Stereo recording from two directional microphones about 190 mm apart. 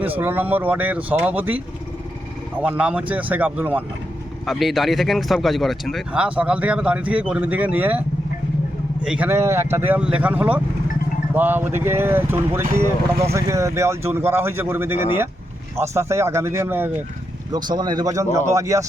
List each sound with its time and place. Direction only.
0.0 s speech: 10° right (ahead or behind)
9.0 s speech: 10° right (ahead or behind)
17.5 s speech: 25° right (ahead or behind)